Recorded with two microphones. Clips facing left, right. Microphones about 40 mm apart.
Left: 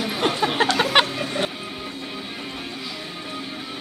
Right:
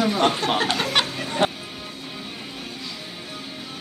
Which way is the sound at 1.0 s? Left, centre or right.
Left.